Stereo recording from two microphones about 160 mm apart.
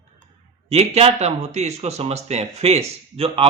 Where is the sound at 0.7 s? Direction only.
40° right (ahead or behind).